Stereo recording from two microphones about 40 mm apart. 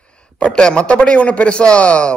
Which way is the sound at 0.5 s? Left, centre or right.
Left.